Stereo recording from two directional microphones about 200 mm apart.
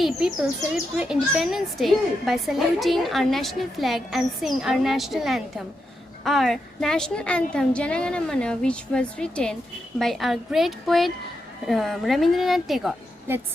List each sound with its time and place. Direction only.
0.0 s a woman's voice: centre (ahead or behind)